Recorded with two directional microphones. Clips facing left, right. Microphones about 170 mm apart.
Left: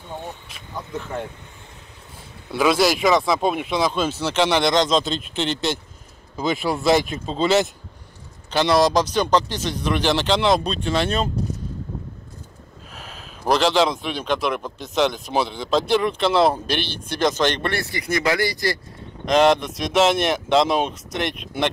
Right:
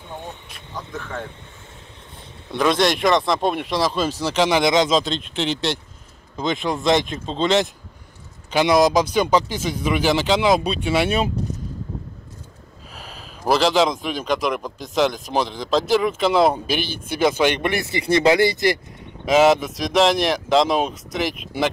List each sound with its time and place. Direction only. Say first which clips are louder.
0.5 s speech: left 1 dB; centre (ahead or behind)
2.5 s speech: even; 5° left (ahead or behind)
8.5 s a man's voice: right 2 dB; 10° right (ahead or behind)
12.9 s speech: right 1 dB; centre (ahead or behind); by 18.8 s 20° right (ahead or behind)
19.2 s speech: right 1 dB; 5° right (ahead or behind)